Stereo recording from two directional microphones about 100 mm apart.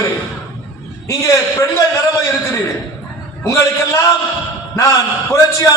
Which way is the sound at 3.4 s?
30° left (ahead or behind).